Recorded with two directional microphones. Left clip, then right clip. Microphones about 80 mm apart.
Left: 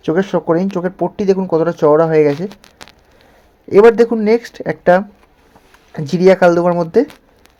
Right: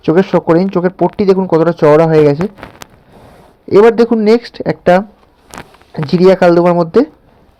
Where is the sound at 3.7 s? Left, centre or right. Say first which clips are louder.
Right 1 dB; right.